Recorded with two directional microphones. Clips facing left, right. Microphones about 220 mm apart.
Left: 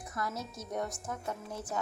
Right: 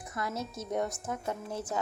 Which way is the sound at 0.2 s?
25° right (ahead or behind).